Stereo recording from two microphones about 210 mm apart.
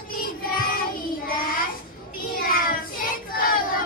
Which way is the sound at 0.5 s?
45° left (ahead or behind).